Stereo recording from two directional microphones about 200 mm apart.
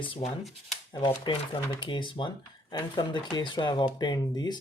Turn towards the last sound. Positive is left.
turn(degrees=20)  # may be behind; listen again after turning